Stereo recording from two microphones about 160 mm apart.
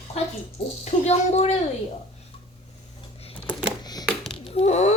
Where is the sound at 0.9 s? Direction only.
45° left (ahead or behind).